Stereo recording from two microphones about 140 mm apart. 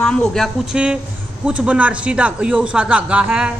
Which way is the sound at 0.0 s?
5° left (ahead or behind).